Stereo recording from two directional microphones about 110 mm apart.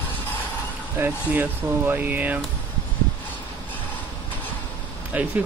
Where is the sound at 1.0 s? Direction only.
15° right (ahead or behind).